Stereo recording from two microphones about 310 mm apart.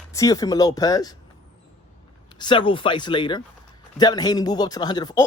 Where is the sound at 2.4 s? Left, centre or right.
Centre.